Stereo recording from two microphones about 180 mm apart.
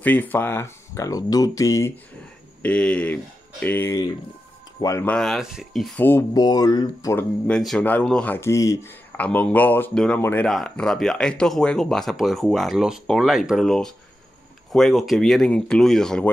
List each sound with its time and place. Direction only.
0.0 s speech: 10° left (ahead or behind)
2.6 s speech: 5° left (ahead or behind)
5.1 s speech: centre (ahead or behind)
6.0 s speech: 10° left (ahead or behind)
6.4 s speech: 20° left (ahead or behind)
7.4 s speech: 5° left (ahead or behind)